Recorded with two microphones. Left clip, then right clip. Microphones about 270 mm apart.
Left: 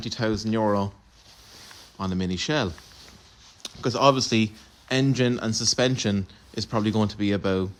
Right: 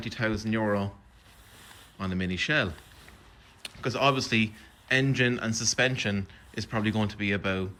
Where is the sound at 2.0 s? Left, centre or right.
Centre.